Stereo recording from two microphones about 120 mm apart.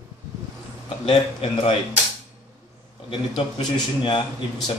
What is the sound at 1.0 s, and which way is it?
Speech, 50° left (ahead or behind).